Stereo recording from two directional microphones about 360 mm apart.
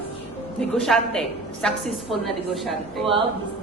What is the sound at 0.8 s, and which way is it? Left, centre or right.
A woman's voice, centre.